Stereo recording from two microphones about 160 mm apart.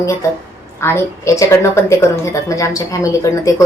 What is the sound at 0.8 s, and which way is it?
A woman's voice, 15° left (ahead or behind).